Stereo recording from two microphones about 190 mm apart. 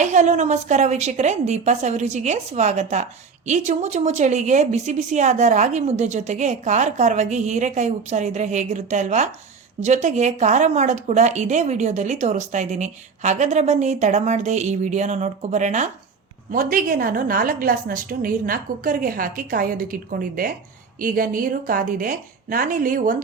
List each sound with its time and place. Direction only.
0.0 s a woman's voice: 40° right (ahead or behind)